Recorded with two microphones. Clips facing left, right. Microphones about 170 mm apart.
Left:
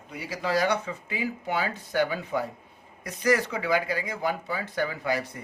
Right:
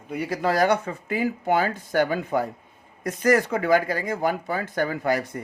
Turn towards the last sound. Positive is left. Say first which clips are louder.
# right 5 dB
turn(degrees=-50)  # may be behind; listen again after turning